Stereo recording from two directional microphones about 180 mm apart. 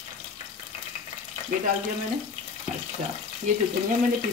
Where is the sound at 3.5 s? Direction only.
40° right (ahead or behind).